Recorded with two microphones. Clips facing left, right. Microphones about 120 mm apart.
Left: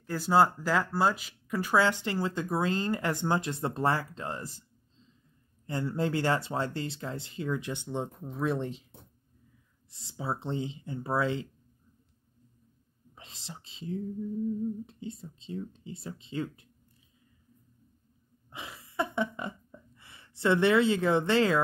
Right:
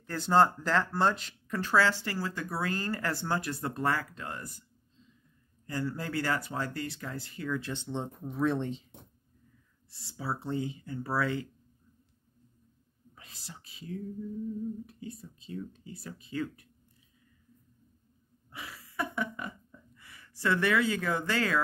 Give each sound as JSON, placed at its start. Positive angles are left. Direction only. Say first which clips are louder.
{"t": 0.0, "sound": "speech", "louder": "even", "side_deg": 5}
{"t": 5.7, "sound": "speech", "louder": "left 4 dB", "side_deg": 25}
{"t": 9.8, "sound": "speech", "louder": "left 2 dB", "side_deg": 20}
{"t": 13.1, "sound": "speech", "louder": "left 3 dB", "side_deg": 25}
{"t": 18.5, "sound": "a sound", "louder": "left 1 dB", "side_deg": 25}